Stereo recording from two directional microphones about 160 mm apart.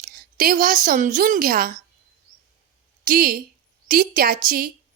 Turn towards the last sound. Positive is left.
turn(degrees=-65)  # may be behind; listen again after turning